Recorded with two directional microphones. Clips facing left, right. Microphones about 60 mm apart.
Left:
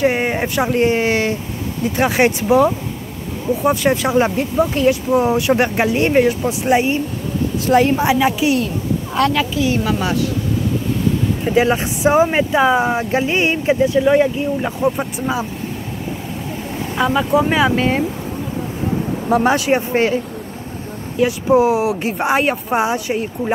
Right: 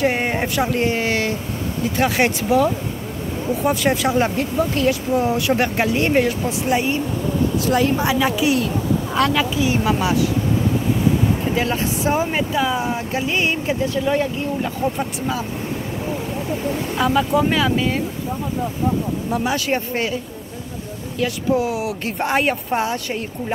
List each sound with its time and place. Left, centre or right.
0.0 s a sound: centre
0.6 s speech: left
3.6 s speech: centre
7.6 s a woman's voice: left
8.0 s speech: centre
9.1 s a woman's voice: centre
9.6 s speech: centre
11.5 s speech: left
16.9 s speech: centre
17.5 s speech: left
17.7 s speech: left
19.5 s speech: left
21.2 s speech: left
22.0 s speech: centre